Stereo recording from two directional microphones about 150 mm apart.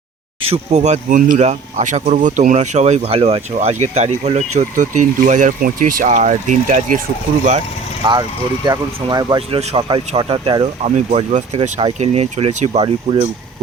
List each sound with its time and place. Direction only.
0.5 s speech: 50° right (ahead or behind)
8.0 s speech: 30° right (ahead or behind)
9.6 s speech: 40° right (ahead or behind)
10.8 s speech: 45° right (ahead or behind)